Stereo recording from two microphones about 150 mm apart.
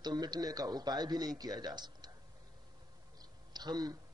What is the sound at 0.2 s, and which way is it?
Speech, 25° right (ahead or behind).